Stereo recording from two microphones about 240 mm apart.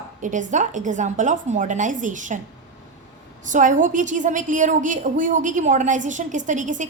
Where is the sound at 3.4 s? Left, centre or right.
Right.